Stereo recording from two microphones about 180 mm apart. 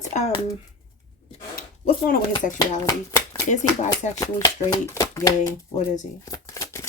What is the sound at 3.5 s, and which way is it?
Speech, 40° left (ahead or behind).